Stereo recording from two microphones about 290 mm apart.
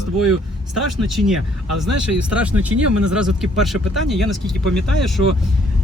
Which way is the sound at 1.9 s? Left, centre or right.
Right.